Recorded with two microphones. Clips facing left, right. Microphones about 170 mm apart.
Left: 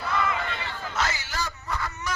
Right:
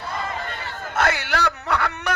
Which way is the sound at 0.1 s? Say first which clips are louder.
Left 3 dB; 35° right (ahead or behind).